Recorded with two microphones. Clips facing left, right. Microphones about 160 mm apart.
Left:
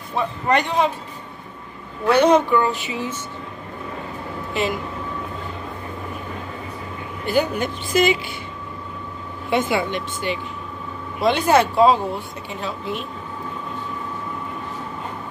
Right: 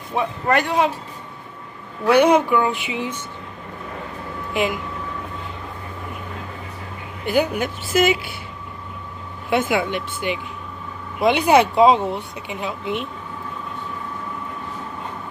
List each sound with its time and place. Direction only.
0.1 s a woman's voice: 10° right (ahead or behind)
2.0 s a woman's voice: 10° right (ahead or behind)
7.2 s a woman's voice: 10° right (ahead or behind)
9.5 s a woman's voice: 10° right (ahead or behind)